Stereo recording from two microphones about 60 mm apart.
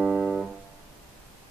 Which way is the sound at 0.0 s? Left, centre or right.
Centre.